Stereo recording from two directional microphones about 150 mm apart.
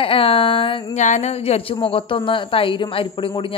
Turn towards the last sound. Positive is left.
turn(degrees=35)  # may be behind; listen again after turning